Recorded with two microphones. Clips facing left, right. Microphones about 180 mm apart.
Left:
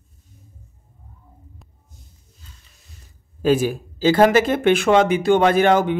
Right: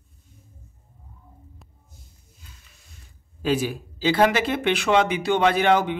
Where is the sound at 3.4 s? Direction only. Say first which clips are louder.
Left 6 dB; 50° left (ahead or behind).